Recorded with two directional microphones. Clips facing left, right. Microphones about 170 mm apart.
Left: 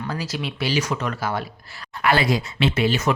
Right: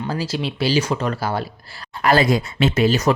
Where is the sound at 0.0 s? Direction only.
30° right (ahead or behind).